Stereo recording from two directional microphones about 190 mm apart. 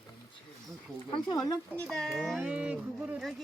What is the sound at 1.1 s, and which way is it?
Speech, 25° left (ahead or behind).